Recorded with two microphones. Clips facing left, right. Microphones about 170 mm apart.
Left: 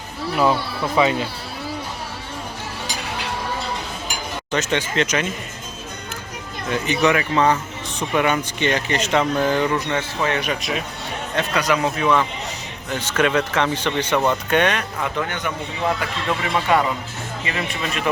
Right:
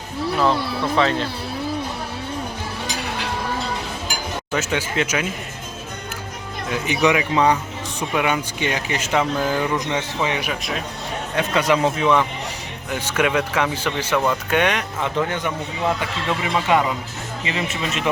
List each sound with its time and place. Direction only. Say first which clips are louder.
0.9 s speech: left 2 dB; 10° left (ahead or behind)
4.5 s speech: left 2 dB; 5° right (ahead or behind)
6.7 s speech: even; 10° right (ahead or behind)
11.5 s speech: right 3 dB; 25° right (ahead or behind)
12.9 s speech: left 1 dB; 10° right (ahead or behind)
16.4 s speech: even; 20° right (ahead or behind)